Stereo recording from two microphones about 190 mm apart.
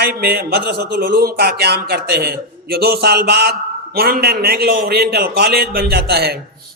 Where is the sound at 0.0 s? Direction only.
55° right (ahead or behind).